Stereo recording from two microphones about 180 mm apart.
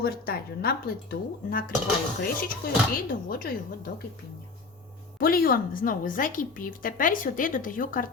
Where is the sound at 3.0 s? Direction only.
55° left (ahead or behind).